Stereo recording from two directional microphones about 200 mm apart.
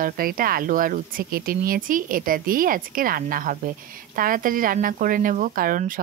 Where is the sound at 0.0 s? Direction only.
45° right (ahead or behind).